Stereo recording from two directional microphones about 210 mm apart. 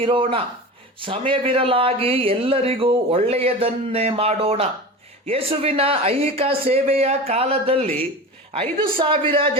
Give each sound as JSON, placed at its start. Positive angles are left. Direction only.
{"t": 0.0, "sound": "speech", "side_deg": -25}